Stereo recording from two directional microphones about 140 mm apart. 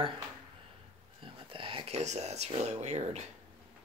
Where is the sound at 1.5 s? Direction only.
40° right (ahead or behind).